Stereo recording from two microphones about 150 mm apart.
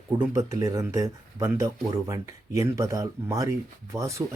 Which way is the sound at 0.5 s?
20° right (ahead or behind).